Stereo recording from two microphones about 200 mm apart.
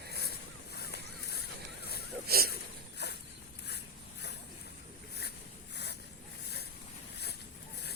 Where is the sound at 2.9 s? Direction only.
55° left (ahead or behind).